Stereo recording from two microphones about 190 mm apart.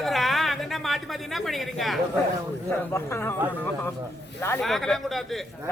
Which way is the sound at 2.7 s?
15° left (ahead or behind).